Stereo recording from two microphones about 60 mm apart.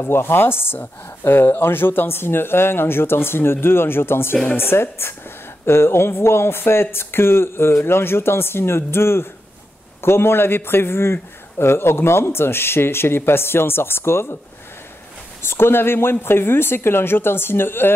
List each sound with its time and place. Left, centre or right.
0.0 s a man's voice: left
15.4 s speech: left